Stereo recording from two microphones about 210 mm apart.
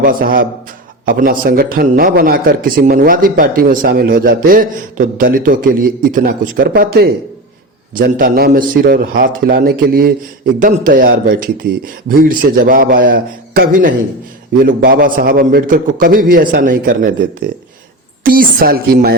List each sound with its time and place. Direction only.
0.0 s a man's voice: 45° right (ahead or behind)
18.2 s a man's voice: 45° right (ahead or behind)